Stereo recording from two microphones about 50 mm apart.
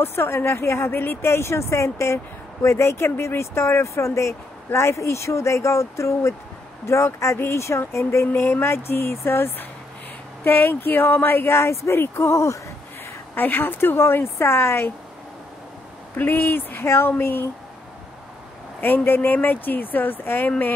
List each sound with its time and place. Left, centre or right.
0.0 s speech: left
7.3 s speech: left
11.5 s speech: left
13.3 s speech: left
16.2 s speech: left
16.7 s speech: left
17.2 s speech: left
19.0 s speech: left